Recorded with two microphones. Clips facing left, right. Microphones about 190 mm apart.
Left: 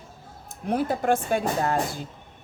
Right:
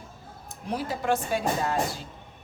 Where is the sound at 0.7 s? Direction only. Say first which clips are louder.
Left 4 dB; 55° left (ahead or behind).